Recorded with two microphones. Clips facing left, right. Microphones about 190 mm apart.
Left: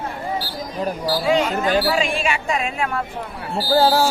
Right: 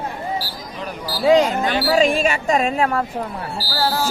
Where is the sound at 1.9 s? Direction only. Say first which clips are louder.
Right 5 dB; 40° right (ahead or behind).